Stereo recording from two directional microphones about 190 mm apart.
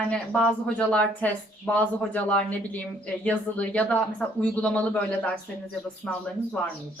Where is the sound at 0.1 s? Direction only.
5° left (ahead or behind).